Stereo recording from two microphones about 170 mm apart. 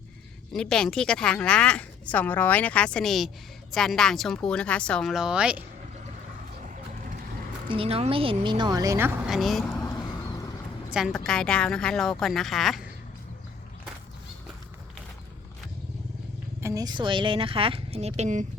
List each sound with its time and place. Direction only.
0.5 s speech: 5° left (ahead or behind)
7.7 s a woman's voice: 35° right (ahead or behind); by 9.1 s 15° right (ahead or behind)
9.2 s speech: centre (ahead or behind)
10.9 s speech: centre (ahead or behind)
16.6 s speech: 20° right (ahead or behind); by 18.4 s 45° right (ahead or behind)